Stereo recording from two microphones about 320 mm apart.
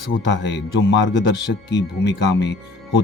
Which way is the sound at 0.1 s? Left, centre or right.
Left.